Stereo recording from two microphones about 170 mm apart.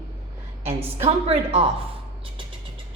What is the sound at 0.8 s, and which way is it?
Speech, 35° right (ahead or behind).